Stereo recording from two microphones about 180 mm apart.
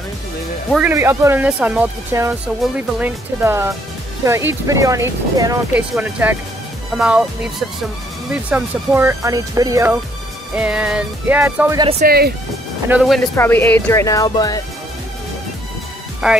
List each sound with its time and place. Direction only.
0.7 s speech: 10° right (ahead or behind)
8.3 s speech: 10° right (ahead or behind)
10.5 s speech: 5° right (ahead or behind)
12.0 s speech: 60° right (ahead or behind)
12.9 s speech: 10° right (ahead or behind)
13.4 s speech: 10° left (ahead or behind)
16.2 s speech: 5° right (ahead or behind)